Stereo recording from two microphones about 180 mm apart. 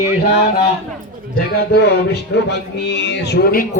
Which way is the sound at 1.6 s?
65° left (ahead or behind).